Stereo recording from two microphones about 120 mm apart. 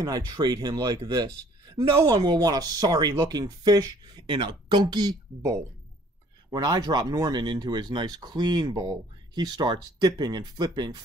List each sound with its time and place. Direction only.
0.0 s speech: 30° right (ahead or behind)